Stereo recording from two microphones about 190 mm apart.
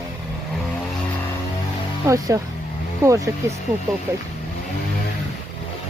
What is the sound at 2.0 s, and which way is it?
Speech, 15° right (ahead or behind).